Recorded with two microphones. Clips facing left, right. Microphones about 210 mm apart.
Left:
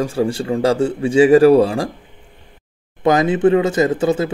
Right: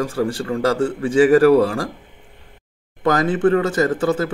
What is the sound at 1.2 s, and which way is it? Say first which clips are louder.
Speech: left 2 dB; 25° left (ahead or behind).